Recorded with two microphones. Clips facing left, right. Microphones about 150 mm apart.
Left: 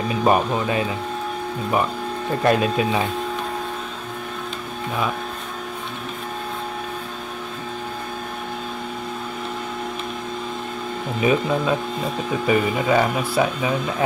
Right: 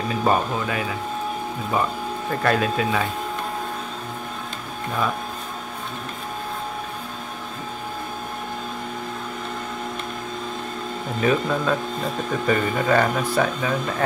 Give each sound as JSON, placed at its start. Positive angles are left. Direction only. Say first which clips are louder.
{"t": 0.1, "sound": "speech", "louder": "left 3 dB", "side_deg": 15}
{"t": 2.4, "sound": "speech", "louder": "left 3 dB", "side_deg": 20}
{"t": 11.1, "sound": "speech", "louder": "left 2 dB", "side_deg": 10}